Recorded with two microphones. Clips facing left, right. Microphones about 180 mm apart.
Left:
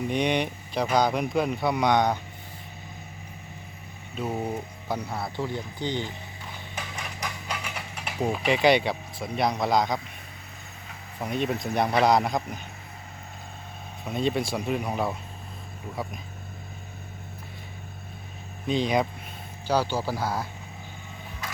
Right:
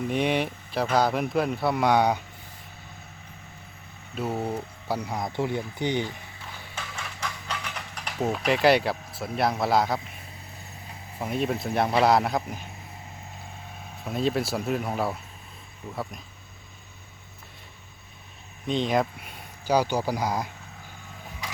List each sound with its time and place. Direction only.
0.1 s a man's voice: 5° right (ahead or behind)
4.1 s speech: 10° right (ahead or behind)
4.4 s speech: 10° left (ahead or behind)
5.0 s speech: 15° right (ahead or behind)
6.7 s a sound: 15° left (ahead or behind); by 10.0 s 5° right (ahead or behind)
11.2 s a man's voice: centre (ahead or behind)
14.0 s a man's voice: centre (ahead or behind)
18.6 s a man's voice: centre (ahead or behind)
19.6 s speech: 15° right (ahead or behind)